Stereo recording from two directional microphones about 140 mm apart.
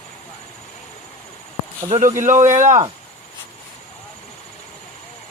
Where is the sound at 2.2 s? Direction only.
65° right (ahead or behind).